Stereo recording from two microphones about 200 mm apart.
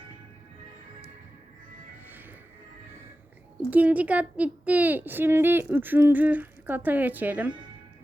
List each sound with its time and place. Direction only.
3.7 s a woman's voice: 5° right (ahead or behind)